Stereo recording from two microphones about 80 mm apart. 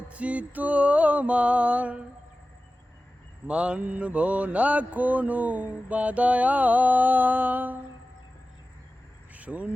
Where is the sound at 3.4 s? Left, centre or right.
Centre.